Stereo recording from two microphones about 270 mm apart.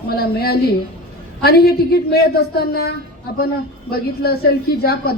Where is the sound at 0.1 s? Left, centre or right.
Left.